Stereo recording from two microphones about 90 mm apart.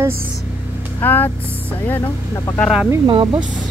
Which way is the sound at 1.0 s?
20° left (ahead or behind).